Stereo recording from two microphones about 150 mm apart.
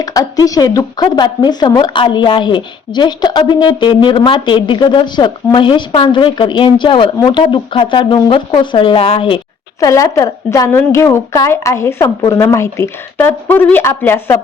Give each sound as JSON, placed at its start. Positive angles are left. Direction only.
{"t": 0.0, "sound": "speech", "side_deg": 25}
{"t": 9.8, "sound": "a woman's voice", "side_deg": 20}